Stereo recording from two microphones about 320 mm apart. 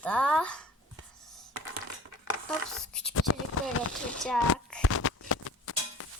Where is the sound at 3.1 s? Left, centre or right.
Left.